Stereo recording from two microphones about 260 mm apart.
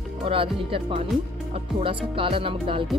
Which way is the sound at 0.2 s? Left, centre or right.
Right.